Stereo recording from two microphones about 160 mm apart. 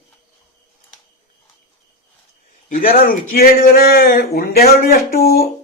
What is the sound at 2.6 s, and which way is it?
Speech, 60° left (ahead or behind).